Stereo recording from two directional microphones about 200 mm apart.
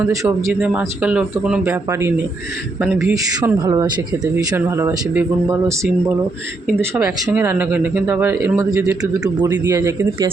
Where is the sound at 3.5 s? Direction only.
15° right (ahead or behind).